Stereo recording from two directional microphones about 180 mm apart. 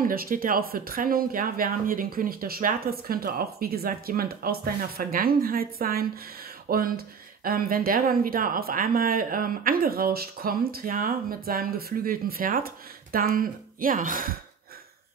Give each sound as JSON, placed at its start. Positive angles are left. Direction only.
{"t": 0.0, "sound": "speech", "side_deg": -50}